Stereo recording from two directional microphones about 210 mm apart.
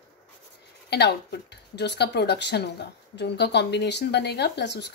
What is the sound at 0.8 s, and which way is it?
Speech, 50° left (ahead or behind).